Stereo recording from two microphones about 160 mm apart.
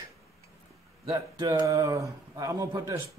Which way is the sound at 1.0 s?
25° right (ahead or behind).